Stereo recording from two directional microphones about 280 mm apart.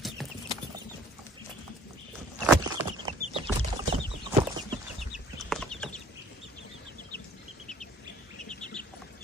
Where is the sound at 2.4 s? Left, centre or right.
Centre.